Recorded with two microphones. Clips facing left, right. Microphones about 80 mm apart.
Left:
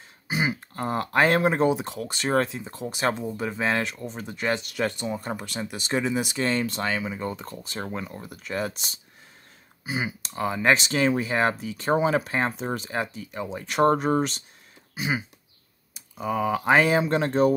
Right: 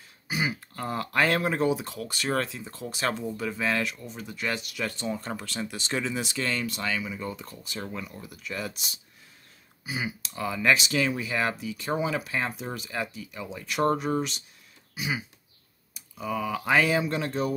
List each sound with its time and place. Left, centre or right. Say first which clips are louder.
0.3 s speech: left 3 dB; left
4.9 s speech: left 2 dB; centre; by 17.6 s left